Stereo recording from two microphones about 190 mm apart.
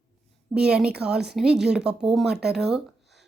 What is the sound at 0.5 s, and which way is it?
Speech, 5° right (ahead or behind).